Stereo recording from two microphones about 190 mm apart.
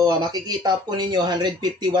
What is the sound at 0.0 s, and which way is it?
Speech, 20° right (ahead or behind).